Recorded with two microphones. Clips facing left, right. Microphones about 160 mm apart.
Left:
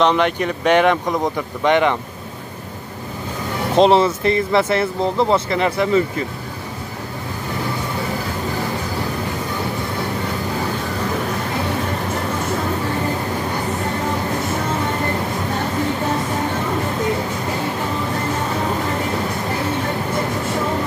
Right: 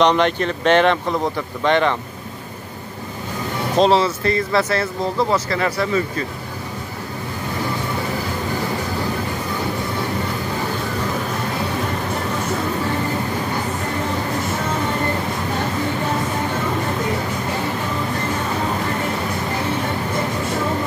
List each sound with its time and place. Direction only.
0.0 s speech: 5° left (ahead or behind)
3.7 s speech: 20° left (ahead or behind)